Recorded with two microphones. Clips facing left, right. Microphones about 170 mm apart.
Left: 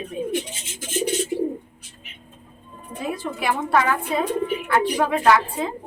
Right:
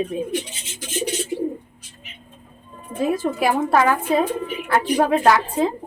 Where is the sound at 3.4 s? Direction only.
40° right (ahead or behind).